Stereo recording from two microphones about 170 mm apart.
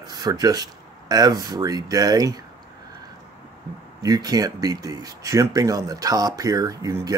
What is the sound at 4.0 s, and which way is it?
Speech, 20° right (ahead or behind).